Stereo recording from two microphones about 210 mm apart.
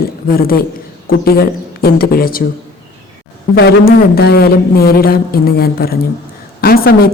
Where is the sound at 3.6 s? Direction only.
50° left (ahead or behind).